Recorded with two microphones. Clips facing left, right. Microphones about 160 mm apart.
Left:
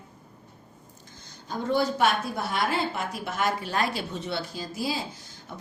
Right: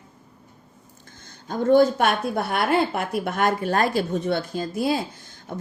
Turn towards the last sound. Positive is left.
turn(degrees=-45)  # may be behind; listen again after turning